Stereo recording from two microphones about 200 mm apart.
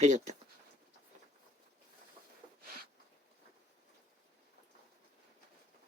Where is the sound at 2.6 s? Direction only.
50° right (ahead or behind).